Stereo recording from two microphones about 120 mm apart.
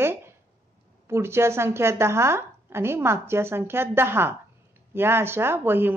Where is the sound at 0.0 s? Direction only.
20° right (ahead or behind).